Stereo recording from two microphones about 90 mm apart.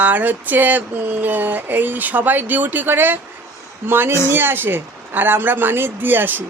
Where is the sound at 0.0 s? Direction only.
20° right (ahead or behind).